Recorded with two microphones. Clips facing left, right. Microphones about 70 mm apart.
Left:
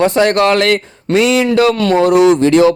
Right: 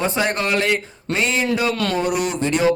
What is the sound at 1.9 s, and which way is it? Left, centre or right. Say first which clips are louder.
Speech: left 12 dB; left.